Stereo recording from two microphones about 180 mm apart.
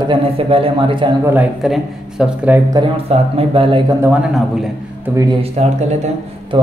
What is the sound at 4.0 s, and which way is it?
Speech, 5° right (ahead or behind).